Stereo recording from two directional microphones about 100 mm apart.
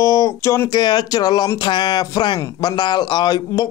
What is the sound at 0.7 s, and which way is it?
Speech, 45° left (ahead or behind).